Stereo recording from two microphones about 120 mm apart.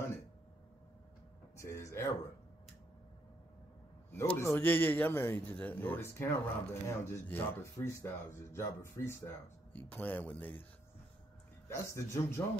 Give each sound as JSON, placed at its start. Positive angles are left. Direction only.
{"t": 1.6, "sound": "a sound", "side_deg": 25}
{"t": 4.1, "sound": "a man's voice", "side_deg": 20}
{"t": 11.7, "sound": "speech", "side_deg": 25}